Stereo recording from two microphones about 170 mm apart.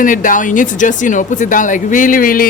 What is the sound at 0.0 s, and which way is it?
A woman's voice, 50° left (ahead or behind).